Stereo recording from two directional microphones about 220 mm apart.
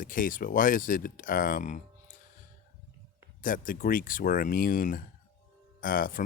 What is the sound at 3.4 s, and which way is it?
Speech, 40° left (ahead or behind).